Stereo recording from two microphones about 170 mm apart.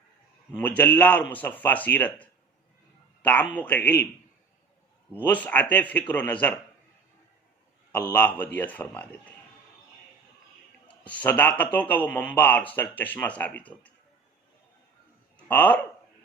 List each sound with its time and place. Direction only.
0.5 s a man's voice: 10° left (ahead or behind)
3.5 s a man's voice: 10° left (ahead or behind)
5.1 s a man's voice: 10° left (ahead or behind)
8.1 s a man's voice: 10° left (ahead or behind)
11.0 s a man's voice: 10° left (ahead or behind)
15.4 s a man's voice: 10° left (ahead or behind)